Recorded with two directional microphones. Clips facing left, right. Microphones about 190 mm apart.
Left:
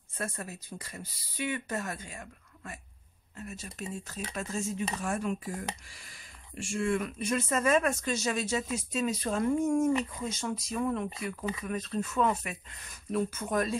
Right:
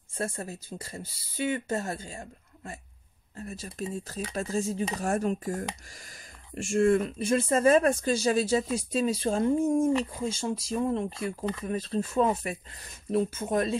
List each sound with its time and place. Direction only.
0.2 s speech: 30° right (ahead or behind); by 7.0 s 45° right (ahead or behind)
7.0 s speech: 30° right (ahead or behind)